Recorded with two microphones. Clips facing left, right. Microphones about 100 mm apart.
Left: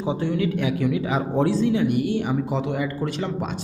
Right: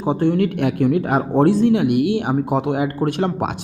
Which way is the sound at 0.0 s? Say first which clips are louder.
Right 6 dB; 55° right (ahead or behind).